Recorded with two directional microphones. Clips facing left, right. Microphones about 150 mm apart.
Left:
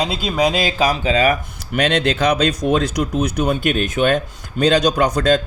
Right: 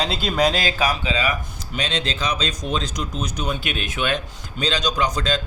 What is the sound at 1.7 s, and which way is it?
Speech, 60° left (ahead or behind).